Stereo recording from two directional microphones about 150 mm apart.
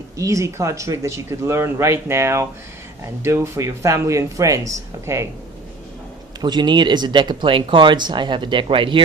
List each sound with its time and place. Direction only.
0.2 s speech: 20° right (ahead or behind)
6.4 s speech: 30° right (ahead or behind)